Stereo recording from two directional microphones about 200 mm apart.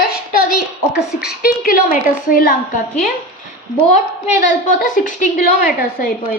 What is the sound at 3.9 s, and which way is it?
A woman's voice, 40° left (ahead or behind).